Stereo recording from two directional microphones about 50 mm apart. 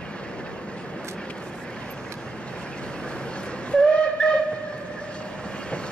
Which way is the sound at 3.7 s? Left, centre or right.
Left.